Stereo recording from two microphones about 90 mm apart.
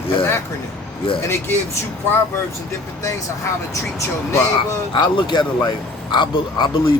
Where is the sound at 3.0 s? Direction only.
35° left (ahead or behind).